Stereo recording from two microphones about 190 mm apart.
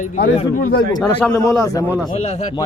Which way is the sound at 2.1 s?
35° left (ahead or behind).